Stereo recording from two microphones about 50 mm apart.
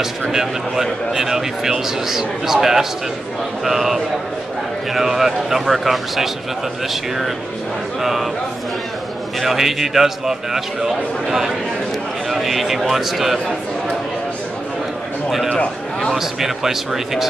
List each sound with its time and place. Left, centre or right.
0.3 s a man's voice: centre
9.4 s a man's voice: centre
15.2 s a man's voice: centre